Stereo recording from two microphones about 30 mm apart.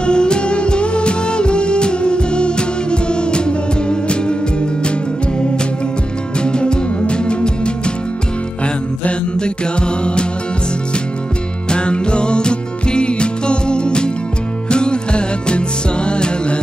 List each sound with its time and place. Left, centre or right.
0.0 s music: left
6.4 s music: left
9.4 s music: left
11.7 s music: left